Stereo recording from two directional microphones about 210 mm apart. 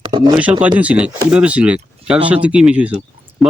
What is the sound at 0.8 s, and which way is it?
Speech, 5° right (ahead or behind).